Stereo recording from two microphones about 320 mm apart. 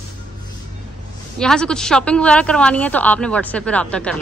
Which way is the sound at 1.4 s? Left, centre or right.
Centre.